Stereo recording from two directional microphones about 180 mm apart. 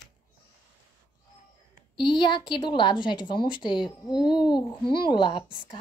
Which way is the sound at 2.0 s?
25° left (ahead or behind).